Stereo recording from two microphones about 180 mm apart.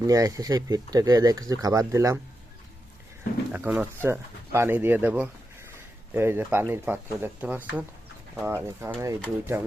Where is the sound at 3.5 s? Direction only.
10° right (ahead or behind).